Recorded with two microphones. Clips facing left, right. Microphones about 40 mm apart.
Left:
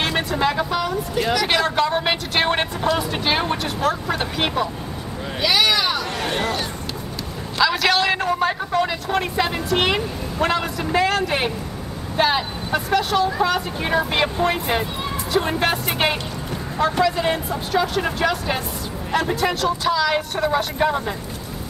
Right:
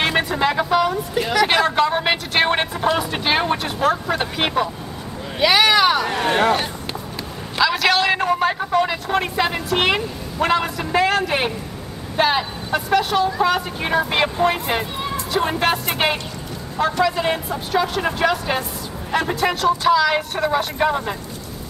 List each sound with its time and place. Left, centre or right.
0.0 s speech: centre
7.5 s speech: centre